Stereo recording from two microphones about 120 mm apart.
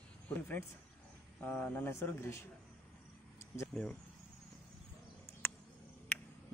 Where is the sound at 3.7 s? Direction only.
10° left (ahead or behind).